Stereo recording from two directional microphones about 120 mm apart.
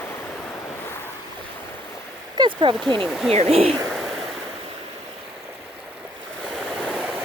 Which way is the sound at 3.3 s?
60° right (ahead or behind).